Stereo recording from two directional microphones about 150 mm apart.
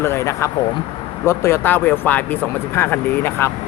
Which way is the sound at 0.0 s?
20° left (ahead or behind).